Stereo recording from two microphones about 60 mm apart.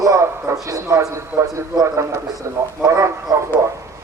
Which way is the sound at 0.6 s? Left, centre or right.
Right.